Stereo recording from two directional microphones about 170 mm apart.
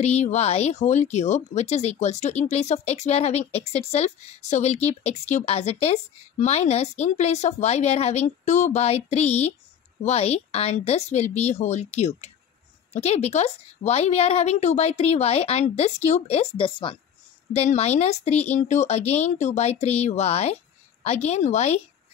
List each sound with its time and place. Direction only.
0.0 s speech: 40° left (ahead or behind)